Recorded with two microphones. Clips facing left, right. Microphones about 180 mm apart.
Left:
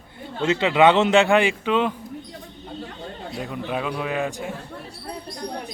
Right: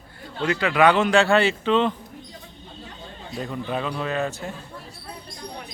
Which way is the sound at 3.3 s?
5° left (ahead or behind).